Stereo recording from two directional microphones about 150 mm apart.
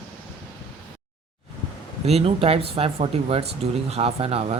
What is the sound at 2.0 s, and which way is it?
Speech, 40° right (ahead or behind).